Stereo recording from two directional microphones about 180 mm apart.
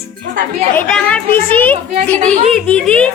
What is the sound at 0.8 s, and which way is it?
Speech, 5° left (ahead or behind).